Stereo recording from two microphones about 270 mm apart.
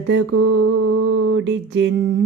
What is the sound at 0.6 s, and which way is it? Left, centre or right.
Mantra, right.